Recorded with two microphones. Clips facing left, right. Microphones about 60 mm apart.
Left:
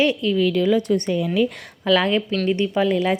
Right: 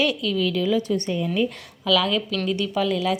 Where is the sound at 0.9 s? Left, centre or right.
Left.